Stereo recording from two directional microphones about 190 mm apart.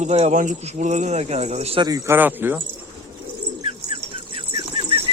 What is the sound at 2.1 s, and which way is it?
Speech, 10° right (ahead or behind).